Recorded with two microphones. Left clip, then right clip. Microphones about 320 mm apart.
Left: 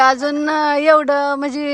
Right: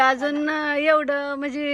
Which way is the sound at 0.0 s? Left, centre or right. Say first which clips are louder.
Left 5 dB; centre.